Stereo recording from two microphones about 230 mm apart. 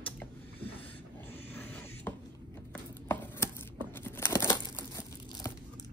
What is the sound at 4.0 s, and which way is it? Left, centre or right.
Crumpling, centre.